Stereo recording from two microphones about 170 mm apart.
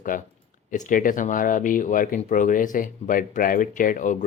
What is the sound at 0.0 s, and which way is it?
Speech, 50° left (ahead or behind).